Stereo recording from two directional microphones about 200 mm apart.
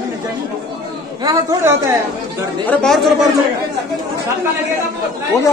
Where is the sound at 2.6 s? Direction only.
Centre (ahead or behind).